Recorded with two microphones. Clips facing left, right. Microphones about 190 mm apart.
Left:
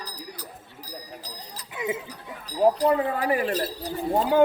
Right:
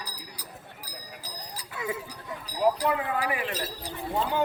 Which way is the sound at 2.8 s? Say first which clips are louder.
Left 5 dB; 40° left (ahead or behind).